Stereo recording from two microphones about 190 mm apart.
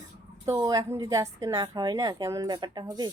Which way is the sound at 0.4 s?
15° right (ahead or behind).